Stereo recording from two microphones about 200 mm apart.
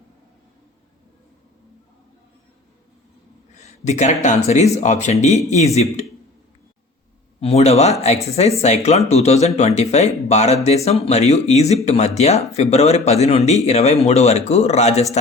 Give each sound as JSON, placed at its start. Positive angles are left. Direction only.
{"t": 3.6, "sound": "speech", "side_deg": 35}
{"t": 7.4, "sound": "a man's voice", "side_deg": 30}